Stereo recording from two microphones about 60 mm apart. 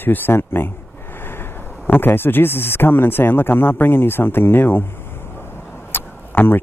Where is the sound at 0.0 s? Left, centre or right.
Left.